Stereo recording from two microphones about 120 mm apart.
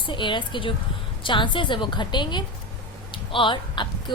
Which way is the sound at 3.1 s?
45° left (ahead or behind).